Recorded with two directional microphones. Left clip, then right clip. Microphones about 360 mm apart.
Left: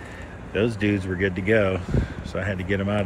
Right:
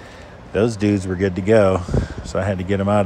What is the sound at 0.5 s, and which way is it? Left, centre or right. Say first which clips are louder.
Speech: right 5 dB; centre.